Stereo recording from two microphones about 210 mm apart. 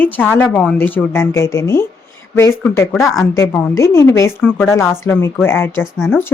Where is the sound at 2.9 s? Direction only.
Centre (ahead or behind).